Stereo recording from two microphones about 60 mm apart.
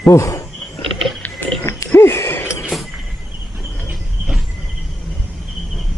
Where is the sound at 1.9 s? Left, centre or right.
Left.